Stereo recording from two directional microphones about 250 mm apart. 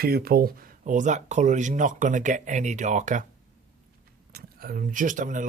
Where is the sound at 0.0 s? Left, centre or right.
Right.